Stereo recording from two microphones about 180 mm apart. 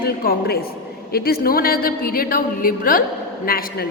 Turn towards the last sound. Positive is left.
turn(degrees=55)  # may be behind; listen again after turning